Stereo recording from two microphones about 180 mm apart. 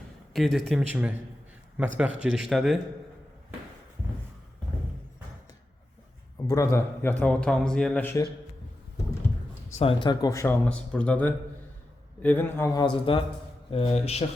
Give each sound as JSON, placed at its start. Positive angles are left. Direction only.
{"t": 0.3, "sound": "speech", "side_deg": 0}
{"t": 6.5, "sound": "a man's voice", "side_deg": 15}
{"t": 9.7, "sound": "speech", "side_deg": 30}
{"t": 10.7, "sound": "a man's voice", "side_deg": 5}
{"t": 12.8, "sound": "speech", "side_deg": 30}